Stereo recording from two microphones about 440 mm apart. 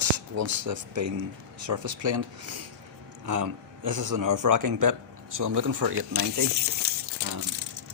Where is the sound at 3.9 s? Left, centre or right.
Right.